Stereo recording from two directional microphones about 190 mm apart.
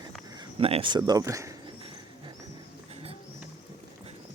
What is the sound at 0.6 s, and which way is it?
Speech, 30° right (ahead or behind).